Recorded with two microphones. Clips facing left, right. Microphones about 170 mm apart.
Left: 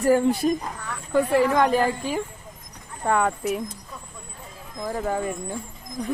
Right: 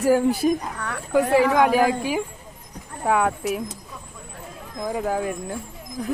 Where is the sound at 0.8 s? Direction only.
70° right (ahead or behind).